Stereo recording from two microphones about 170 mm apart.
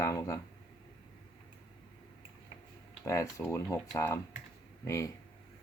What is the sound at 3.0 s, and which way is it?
Speech, 15° left (ahead or behind).